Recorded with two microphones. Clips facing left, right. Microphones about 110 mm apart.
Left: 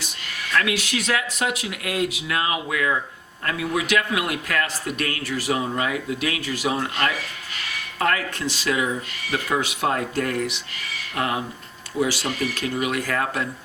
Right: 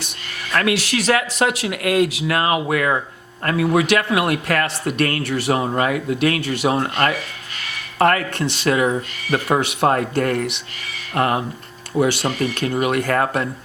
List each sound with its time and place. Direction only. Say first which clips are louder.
0.7 s speech: right 6 dB; 75° right (ahead or behind)
2.2 s speech: right 6 dB; 55° right (ahead or behind)
6.8 s speech: right 5 dB; 45° right (ahead or behind)
7.9 s speech: right 7 dB; 60° right (ahead or behind)
9.5 s speech: right 6 dB; 65° right (ahead or behind)
11.1 s speech: right 6 dB; 50° right (ahead or behind)